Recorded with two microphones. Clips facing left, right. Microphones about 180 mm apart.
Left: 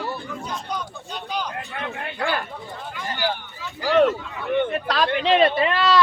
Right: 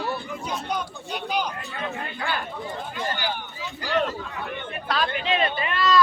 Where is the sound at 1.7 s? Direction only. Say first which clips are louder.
Left 1 dB; 65° left (ahead or behind).